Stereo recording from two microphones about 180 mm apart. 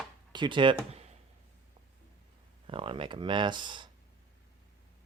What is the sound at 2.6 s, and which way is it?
Speech, 30° right (ahead or behind).